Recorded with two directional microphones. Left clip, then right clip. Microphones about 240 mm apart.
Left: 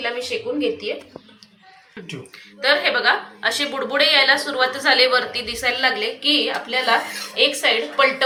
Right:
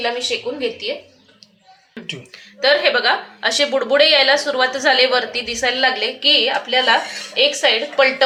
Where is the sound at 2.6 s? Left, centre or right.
Right.